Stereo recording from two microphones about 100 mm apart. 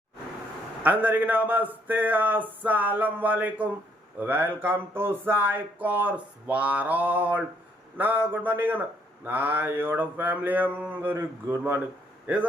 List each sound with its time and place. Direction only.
0.8 s speech: 15° right (ahead or behind)